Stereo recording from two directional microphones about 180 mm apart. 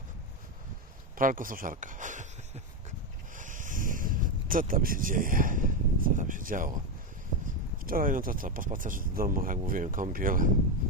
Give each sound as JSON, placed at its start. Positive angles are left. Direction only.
{"t": 1.2, "sound": "speech", "side_deg": -50}
{"t": 3.3, "sound": "a sound", "side_deg": -45}
{"t": 7.4, "sound": "speech", "side_deg": -50}